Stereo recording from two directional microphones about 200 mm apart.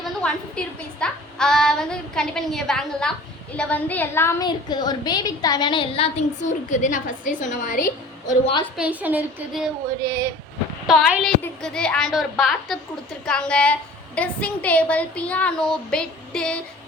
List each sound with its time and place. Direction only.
0.0 s a woman's voice: 5° left (ahead or behind); by 7.9 s 40° left (ahead or behind)
8.3 s a woman's voice: 30° left (ahead or behind)
8.6 s a woman's voice: 5° right (ahead or behind)
10.8 s a woman's voice: centre (ahead or behind)